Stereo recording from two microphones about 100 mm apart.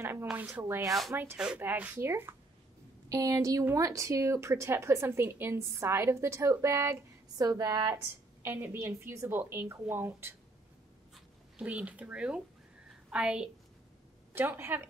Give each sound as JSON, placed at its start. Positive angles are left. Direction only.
{"t": 0.0, "sound": "a sound", "side_deg": -25}
{"t": 0.5, "sound": "a woman's voice", "side_deg": -25}
{"t": 3.1, "sound": "a woman's voice", "side_deg": -35}
{"t": 11.1, "sound": "speech", "side_deg": -10}
{"t": 14.3, "sound": "a woman's voice", "side_deg": -20}